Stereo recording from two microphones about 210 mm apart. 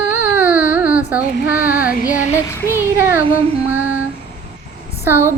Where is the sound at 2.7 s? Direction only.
10° right (ahead or behind).